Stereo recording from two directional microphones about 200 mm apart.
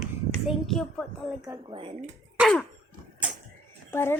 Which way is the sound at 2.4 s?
Centre (ahead or behind).